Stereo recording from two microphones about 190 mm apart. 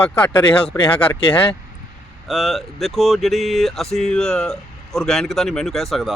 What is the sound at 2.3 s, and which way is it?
Speech, centre (ahead or behind).